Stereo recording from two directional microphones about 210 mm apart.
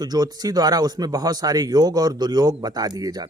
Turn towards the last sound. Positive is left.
turn(degrees=-20)  # may be behind; listen again after turning